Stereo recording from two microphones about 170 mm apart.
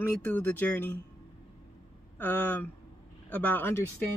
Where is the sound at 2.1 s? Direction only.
10° left (ahead or behind).